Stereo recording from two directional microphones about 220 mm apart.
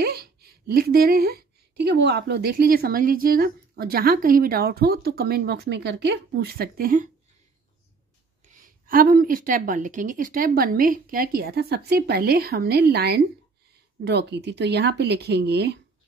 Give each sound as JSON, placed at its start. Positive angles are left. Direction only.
{"t": 0.0, "sound": "speech", "side_deg": -45}
{"t": 8.5, "sound": "a woman's voice", "side_deg": -40}